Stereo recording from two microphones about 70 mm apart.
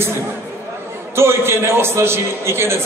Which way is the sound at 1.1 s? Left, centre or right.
Right.